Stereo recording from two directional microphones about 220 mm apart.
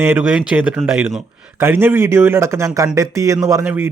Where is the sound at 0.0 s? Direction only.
5° right (ahead or behind).